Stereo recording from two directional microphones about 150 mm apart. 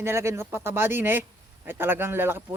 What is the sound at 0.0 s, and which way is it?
Speech, 15° right (ahead or behind).